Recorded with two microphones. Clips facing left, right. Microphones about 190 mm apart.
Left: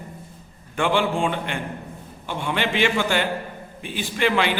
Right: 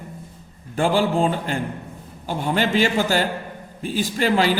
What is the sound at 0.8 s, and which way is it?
A man's voice, 40° right (ahead or behind).